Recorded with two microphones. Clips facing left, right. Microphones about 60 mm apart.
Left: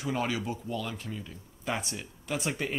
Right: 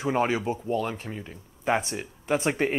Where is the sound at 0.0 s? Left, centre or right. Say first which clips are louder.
Right 6 dB; right.